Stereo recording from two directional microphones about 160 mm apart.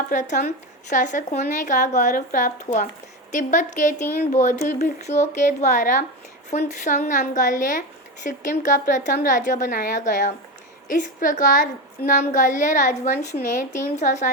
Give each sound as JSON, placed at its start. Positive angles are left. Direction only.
{"t": 0.1, "sound": "a woman's voice", "side_deg": 50}